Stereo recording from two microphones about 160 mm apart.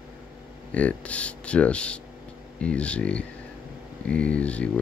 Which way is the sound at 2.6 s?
5° left (ahead or behind).